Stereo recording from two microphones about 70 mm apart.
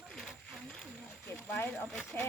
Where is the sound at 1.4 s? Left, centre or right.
Left.